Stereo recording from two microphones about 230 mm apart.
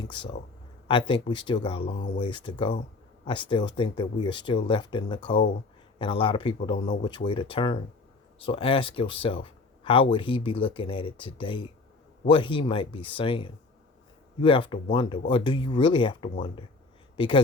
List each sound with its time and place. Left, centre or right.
0.9 s speech: left